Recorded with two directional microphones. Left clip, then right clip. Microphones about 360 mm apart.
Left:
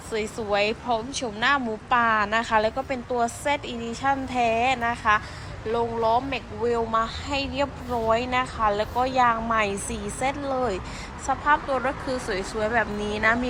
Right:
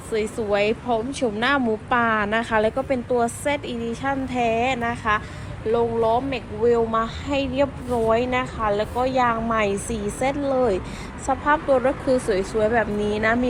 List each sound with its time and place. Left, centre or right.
0.1 s speech: centre